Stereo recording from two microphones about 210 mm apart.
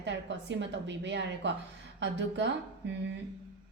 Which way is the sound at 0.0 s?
55° right (ahead or behind).